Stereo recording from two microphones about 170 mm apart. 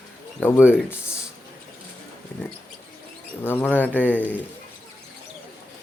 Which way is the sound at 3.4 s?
10° left (ahead or behind).